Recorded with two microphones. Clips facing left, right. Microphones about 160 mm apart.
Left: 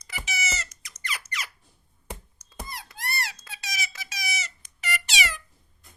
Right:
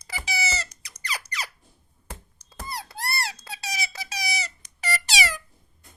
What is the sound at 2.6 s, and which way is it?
Squeak, 35° right (ahead or behind).